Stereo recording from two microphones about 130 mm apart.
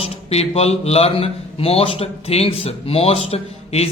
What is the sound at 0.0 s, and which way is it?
A man's voice, 50° left (ahead or behind).